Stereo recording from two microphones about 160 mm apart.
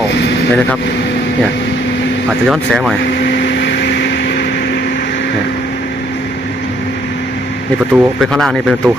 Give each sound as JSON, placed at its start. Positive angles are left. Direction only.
{"t": 2.5, "sound": "speech", "side_deg": 0}
{"t": 3.9, "sound": "vehicle", "side_deg": 90}
{"t": 7.9, "sound": "speech", "side_deg": 0}